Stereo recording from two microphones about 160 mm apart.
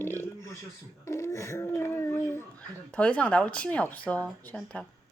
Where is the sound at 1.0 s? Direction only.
15° left (ahead or behind).